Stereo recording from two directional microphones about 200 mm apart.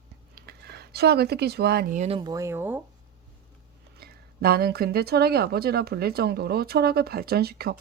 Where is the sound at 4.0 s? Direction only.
50° right (ahead or behind).